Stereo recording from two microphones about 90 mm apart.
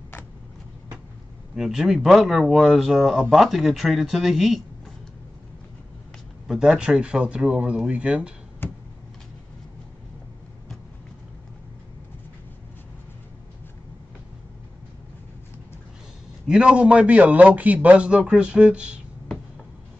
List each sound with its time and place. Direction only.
1.5 s speech: 5° right (ahead or behind)
6.4 s a man's voice: 5° right (ahead or behind)
8.6 s a sound: 25° left (ahead or behind)
16.4 s a man's voice: 10° right (ahead or behind)